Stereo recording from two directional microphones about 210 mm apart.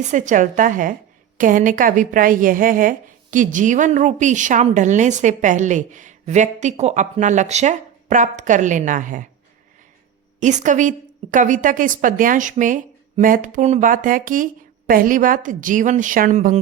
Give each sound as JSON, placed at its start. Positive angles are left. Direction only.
{"t": 0.0, "sound": "a woman's voice", "side_deg": -35}
{"t": 10.4, "sound": "a woman's voice", "side_deg": -35}